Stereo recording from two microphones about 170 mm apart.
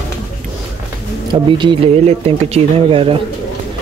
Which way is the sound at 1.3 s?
30° right (ahead or behind).